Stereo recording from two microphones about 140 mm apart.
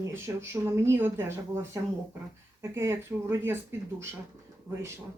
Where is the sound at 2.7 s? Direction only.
20° right (ahead or behind).